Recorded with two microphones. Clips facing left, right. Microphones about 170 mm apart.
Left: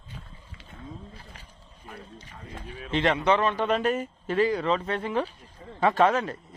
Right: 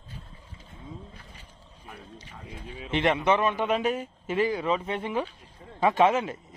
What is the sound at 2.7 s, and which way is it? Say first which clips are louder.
Speech: even; 20° right (ahead or behind).